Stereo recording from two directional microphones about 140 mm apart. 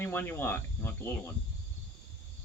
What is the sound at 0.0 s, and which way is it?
Speech, 15° left (ahead or behind).